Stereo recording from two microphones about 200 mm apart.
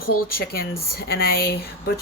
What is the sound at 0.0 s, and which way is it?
Speech, 50° left (ahead or behind).